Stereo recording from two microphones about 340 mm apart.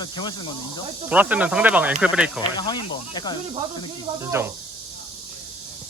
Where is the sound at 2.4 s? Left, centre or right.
Centre.